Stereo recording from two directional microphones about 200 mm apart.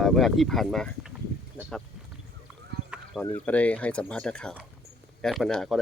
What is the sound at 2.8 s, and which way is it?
Speech, 5° left (ahead or behind).